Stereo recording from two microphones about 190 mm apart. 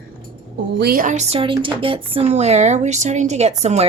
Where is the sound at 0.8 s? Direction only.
50° right (ahead or behind).